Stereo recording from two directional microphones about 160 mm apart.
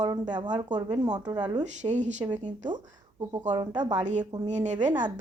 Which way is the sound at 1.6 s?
45° right (ahead or behind).